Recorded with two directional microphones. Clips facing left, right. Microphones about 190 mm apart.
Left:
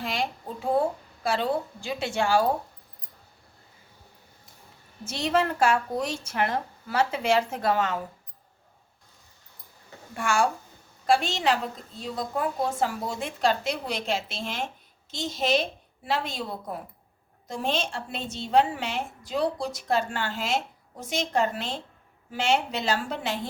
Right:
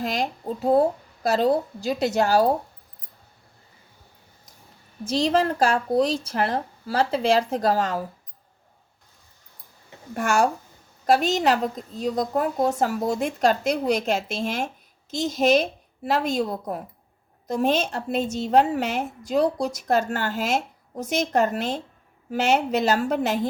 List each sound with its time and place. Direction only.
0.0 s speech: 40° right (ahead or behind)
5.0 s speech: 35° right (ahead or behind)
10.2 s a woman's voice: 40° right (ahead or behind)